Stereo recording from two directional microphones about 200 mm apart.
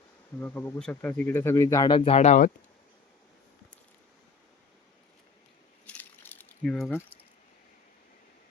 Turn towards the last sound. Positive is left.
turn(degrees=5)  # may be behind; listen again after turning